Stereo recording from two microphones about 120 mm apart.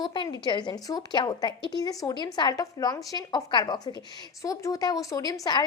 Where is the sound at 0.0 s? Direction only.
40° left (ahead or behind).